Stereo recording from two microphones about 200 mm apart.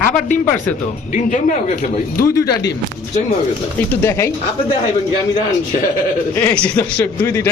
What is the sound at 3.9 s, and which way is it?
Speech, 15° left (ahead or behind).